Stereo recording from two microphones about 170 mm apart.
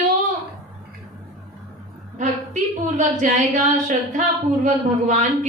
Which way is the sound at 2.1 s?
45° right (ahead or behind).